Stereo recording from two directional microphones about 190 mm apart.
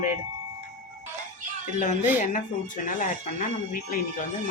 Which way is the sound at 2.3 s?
45° left (ahead or behind).